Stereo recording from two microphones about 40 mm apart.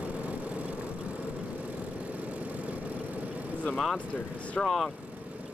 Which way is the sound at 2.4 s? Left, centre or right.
Right.